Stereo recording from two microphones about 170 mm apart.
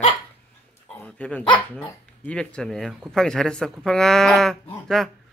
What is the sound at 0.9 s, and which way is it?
Dog, 10° left (ahead or behind).